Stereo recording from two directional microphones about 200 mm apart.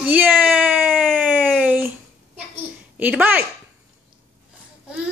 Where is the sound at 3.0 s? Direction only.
10° right (ahead or behind).